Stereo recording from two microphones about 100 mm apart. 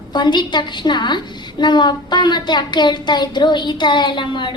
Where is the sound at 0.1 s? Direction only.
50° left (ahead or behind).